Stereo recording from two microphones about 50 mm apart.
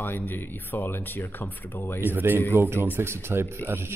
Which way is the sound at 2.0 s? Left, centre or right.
Right.